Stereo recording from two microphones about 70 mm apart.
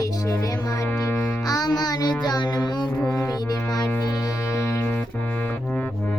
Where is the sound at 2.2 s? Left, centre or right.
Left.